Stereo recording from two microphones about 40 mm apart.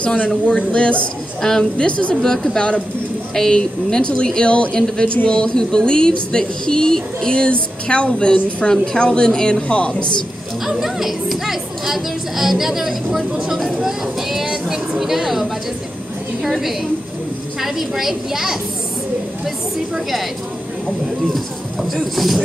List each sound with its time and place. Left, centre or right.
0.0 s speech: left
1.4 s speech: centre
1.8 s speech: left
2.2 s speech: centre; by 10.2 s left
10.6 s speech: centre
15.0 s a woman's voice: centre
21.9 s speech: centre